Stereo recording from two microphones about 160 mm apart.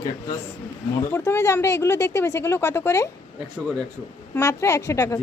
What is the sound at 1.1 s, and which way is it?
Speech, 15° left (ahead or behind).